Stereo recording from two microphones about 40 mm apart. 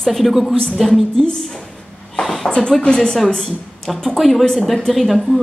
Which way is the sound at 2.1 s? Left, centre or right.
Centre.